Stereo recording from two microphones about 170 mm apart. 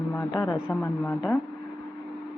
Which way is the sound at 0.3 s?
20° left (ahead or behind).